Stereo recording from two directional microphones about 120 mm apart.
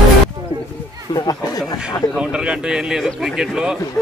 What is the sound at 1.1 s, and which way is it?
Chatter, 35° left (ahead or behind).